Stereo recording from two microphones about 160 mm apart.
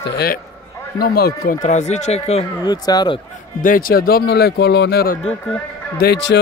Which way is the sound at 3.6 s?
60° left (ahead or behind).